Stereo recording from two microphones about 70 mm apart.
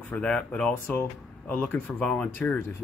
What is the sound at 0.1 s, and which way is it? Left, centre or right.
Speech, centre.